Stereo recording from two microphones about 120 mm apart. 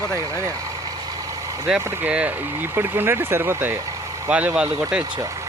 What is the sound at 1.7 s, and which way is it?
Speech, 10° right (ahead or behind).